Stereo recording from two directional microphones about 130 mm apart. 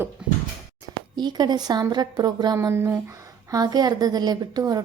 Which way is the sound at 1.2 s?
35° right (ahead or behind).